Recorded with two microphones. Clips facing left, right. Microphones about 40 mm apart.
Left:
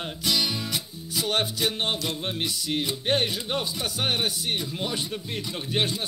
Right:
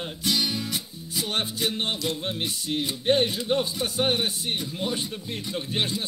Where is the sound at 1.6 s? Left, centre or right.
Left.